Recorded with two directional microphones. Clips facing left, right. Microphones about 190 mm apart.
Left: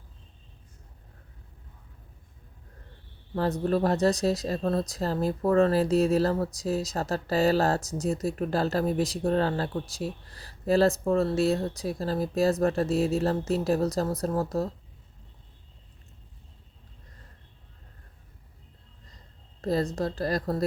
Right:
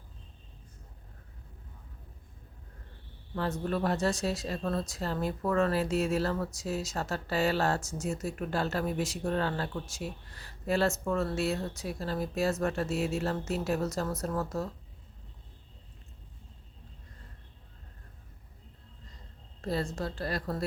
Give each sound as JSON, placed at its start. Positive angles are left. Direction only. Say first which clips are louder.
{"t": 3.3, "sound": "speech", "louder": "left 6 dB", "side_deg": 35}
{"t": 19.6, "sound": "speech", "louder": "left 6 dB", "side_deg": 40}